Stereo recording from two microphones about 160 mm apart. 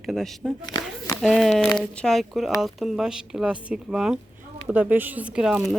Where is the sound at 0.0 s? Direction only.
Centre (ahead or behind).